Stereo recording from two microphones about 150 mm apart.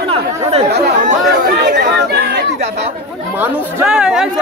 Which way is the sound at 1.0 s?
80° right.